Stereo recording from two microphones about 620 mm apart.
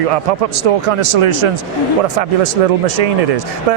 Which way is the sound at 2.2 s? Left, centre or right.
Right.